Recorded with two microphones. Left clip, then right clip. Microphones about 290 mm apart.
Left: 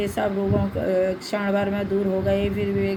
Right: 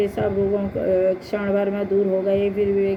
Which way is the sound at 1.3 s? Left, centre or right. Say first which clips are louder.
Right 2 dB; left.